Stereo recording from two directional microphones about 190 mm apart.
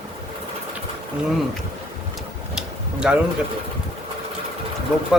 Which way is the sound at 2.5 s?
5° right (ahead or behind).